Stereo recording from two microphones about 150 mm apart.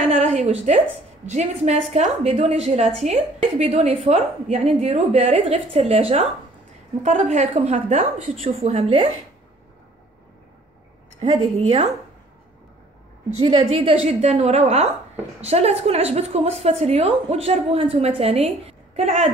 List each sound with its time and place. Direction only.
0.1 s a sound: 50° right (ahead or behind)
1.3 s a woman's voice: 50° right (ahead or behind)
7.0 s a woman's voice: 55° right (ahead or behind)
11.2 s a woman's voice: 40° right (ahead or behind)
13.7 s a woman's voice: 40° right (ahead or behind)